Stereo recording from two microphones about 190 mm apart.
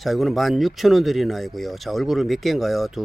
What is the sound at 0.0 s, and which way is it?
Speech, centre (ahead or behind).